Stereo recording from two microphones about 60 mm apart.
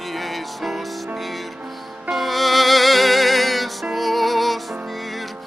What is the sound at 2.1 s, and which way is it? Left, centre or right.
Music, centre.